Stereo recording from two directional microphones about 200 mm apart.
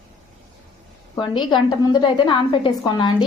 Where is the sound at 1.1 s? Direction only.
25° left (ahead or behind).